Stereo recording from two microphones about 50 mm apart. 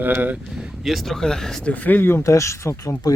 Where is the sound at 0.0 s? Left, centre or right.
Right.